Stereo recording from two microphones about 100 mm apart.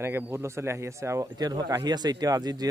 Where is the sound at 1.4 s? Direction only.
40° right (ahead or behind).